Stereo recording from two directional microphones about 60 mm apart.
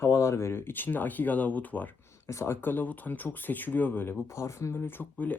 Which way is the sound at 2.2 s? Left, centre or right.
Left.